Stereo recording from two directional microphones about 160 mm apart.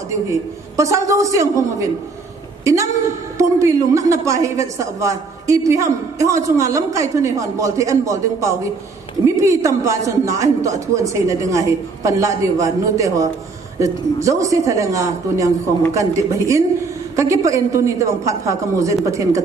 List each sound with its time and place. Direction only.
0.1 s a woman's voice: 20° right (ahead or behind)